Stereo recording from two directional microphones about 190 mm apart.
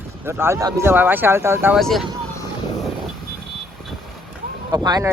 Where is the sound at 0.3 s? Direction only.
15° right (ahead or behind).